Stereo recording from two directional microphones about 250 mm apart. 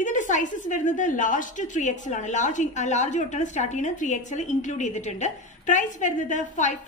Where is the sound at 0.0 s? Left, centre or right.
Left.